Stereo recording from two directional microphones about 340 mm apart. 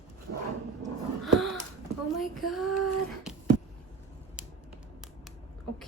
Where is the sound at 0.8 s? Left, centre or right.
Centre.